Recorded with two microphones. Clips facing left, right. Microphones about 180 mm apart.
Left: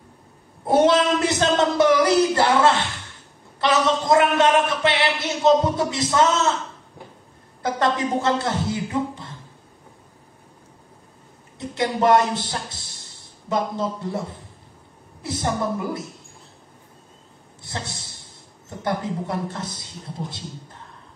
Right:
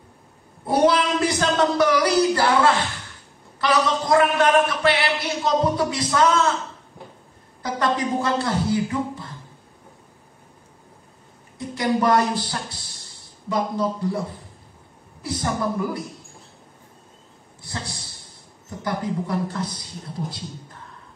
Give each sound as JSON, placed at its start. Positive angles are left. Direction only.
{"t": 0.7, "sound": "a man's voice", "side_deg": 25}
{"t": 8.0, "sound": "speech", "side_deg": 25}
{"t": 11.5, "sound": "a man's voice", "side_deg": 25}
{"t": 15.2, "sound": "a man's voice", "side_deg": 25}
{"t": 17.6, "sound": "a man's voice", "side_deg": 25}